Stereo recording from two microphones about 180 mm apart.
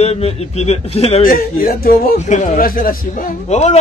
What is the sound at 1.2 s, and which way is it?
Speech, 50° left (ahead or behind).